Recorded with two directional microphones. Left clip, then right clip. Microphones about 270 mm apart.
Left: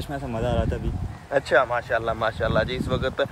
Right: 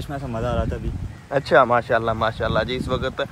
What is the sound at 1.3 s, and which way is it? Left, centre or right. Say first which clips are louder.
Speech: right 4 dB; centre.